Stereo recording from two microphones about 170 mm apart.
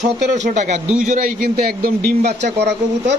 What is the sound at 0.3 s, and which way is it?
A man's voice, 45° right (ahead or behind).